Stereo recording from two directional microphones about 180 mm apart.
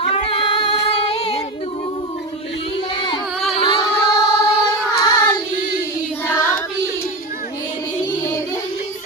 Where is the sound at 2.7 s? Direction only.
25° left (ahead or behind).